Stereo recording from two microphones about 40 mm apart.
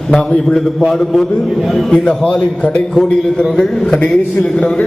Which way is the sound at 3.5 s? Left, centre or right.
Centre.